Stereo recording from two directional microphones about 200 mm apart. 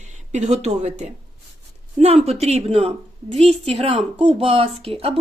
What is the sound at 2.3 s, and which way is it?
A woman's voice, 30° right (ahead or behind).